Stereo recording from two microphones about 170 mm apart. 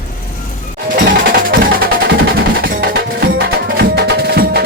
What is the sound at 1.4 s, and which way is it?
Music, 55° right (ahead or behind).